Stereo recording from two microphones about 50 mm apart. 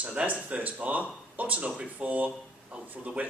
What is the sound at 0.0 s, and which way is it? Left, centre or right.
Speech, right.